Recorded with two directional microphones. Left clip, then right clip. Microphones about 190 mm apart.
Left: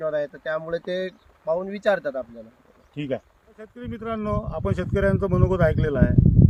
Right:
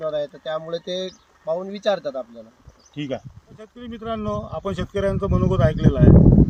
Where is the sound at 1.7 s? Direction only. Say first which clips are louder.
Even; 25° left (ahead or behind).